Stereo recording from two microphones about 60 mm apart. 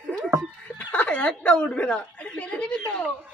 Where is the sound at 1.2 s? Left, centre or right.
Centre.